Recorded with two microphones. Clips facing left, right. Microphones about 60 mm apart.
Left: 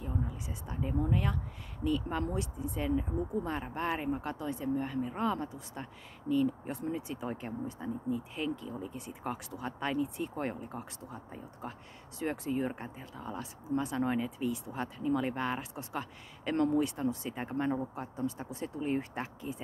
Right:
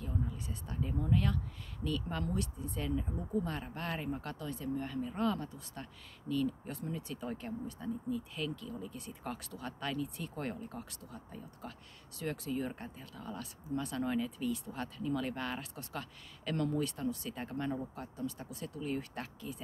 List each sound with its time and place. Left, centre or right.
0.0 s speech: centre